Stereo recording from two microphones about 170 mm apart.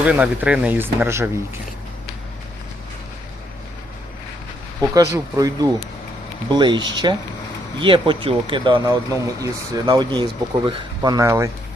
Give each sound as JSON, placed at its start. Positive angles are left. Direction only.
{"t": 0.0, "sound": "speech", "side_deg": -10}
{"t": 4.9, "sound": "speech", "side_deg": -20}